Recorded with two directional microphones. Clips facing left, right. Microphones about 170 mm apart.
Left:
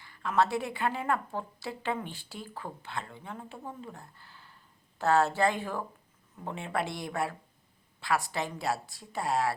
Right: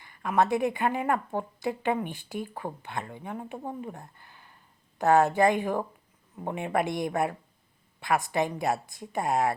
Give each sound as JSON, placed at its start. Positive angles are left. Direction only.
{"t": 0.0, "sound": "speech", "side_deg": -15}
{"t": 3.8, "sound": "a sound", "side_deg": -20}
{"t": 4.9, "sound": "a woman's voice", "side_deg": -15}